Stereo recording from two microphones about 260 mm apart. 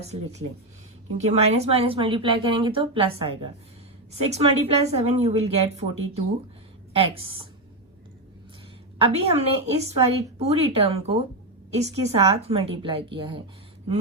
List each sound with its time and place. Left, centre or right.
0.0 s a woman's voice: right
9.0 s a woman's voice: right